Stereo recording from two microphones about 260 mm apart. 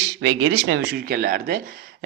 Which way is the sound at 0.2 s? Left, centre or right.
Right.